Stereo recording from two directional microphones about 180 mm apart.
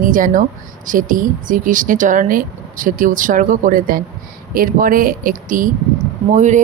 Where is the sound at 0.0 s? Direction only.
50° right (ahead or behind).